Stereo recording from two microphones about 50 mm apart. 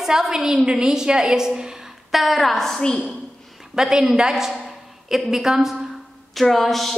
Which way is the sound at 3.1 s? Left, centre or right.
Centre.